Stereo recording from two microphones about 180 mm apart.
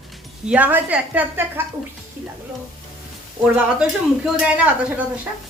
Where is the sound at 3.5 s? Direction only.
5° right (ahead or behind).